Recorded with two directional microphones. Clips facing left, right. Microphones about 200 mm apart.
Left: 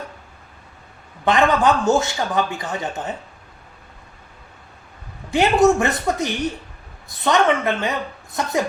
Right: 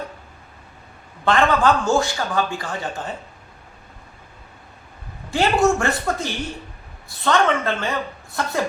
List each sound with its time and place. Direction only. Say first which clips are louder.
1.2 s a man's voice: left 1 dB; 20° left (ahead or behind)
5.3 s a man's voice: left 3 dB; 20° left (ahead or behind)